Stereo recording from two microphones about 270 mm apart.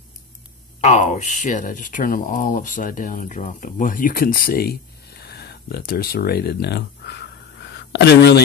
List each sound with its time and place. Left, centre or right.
0.7 s speech: left